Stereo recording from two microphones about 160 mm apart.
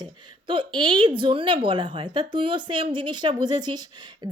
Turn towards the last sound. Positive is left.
turn(degrees=-25)  # may be behind; listen again after turning